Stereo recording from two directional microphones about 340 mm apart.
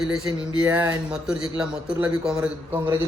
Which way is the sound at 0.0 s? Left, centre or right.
Centre.